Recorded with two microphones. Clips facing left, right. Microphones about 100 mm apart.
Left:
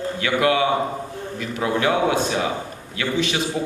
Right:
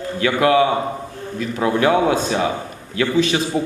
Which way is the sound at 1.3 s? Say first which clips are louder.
Right 4 dB; 35° right (ahead or behind).